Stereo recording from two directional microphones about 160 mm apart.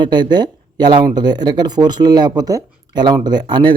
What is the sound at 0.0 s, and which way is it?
Speech, 30° right (ahead or behind).